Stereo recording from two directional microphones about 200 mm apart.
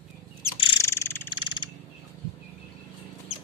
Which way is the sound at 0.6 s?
25° left (ahead or behind).